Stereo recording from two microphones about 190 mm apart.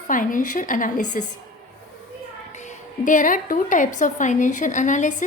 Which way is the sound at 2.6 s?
40° left (ahead or behind).